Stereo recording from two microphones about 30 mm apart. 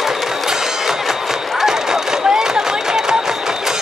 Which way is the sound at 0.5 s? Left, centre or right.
Centre.